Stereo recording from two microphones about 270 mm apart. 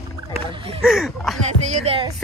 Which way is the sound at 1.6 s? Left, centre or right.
Right.